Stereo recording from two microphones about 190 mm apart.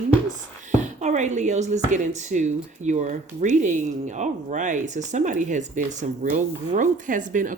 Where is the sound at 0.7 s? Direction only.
40° right (ahead or behind).